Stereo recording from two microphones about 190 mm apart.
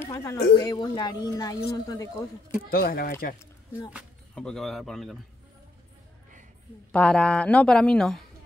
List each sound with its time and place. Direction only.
0.0 s a woman's voice: 15° left (ahead or behind)
2.6 s speech: 50° left (ahead or behind)
4.4 s speech: centre (ahead or behind)
6.9 s speech: 5° left (ahead or behind)